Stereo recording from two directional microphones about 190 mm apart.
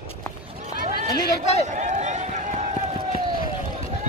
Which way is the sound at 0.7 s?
45° right (ahead or behind).